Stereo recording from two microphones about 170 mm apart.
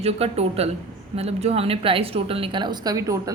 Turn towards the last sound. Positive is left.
turn(degrees=-20)  # may be behind; listen again after turning